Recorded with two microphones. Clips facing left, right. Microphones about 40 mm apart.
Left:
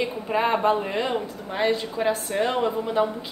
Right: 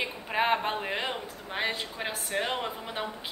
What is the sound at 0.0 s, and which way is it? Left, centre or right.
A woman's voice, centre.